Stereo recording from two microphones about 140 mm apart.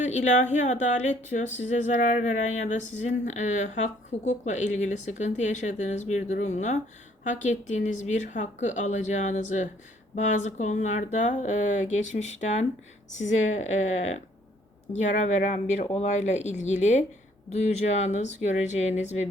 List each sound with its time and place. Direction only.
0.0 s speech: 55° left (ahead or behind)